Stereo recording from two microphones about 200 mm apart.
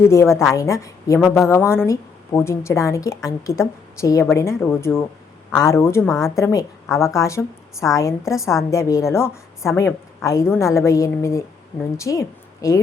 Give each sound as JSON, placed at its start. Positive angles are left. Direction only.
{"t": 0.0, "sound": "a woman's voice", "side_deg": 15}